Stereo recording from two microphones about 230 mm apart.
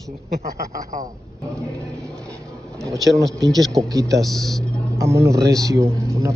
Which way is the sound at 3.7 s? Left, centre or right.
Centre.